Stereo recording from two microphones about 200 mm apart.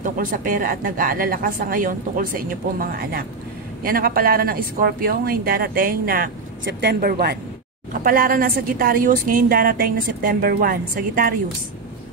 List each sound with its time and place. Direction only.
0.0 s a woman's voice: 45° right (ahead or behind)
6.6 s a woman's voice: 55° right (ahead or behind)